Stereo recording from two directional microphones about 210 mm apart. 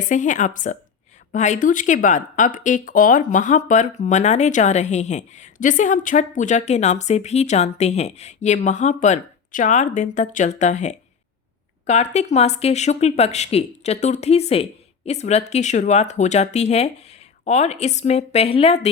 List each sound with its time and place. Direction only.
0.1 s speech: 35° left (ahead or behind)